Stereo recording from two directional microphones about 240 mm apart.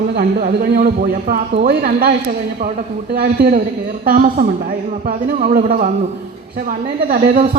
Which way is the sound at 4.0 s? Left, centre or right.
Right.